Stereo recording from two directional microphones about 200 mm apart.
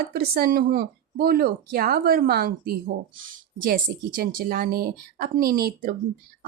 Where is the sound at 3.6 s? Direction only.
45° right (ahead or behind).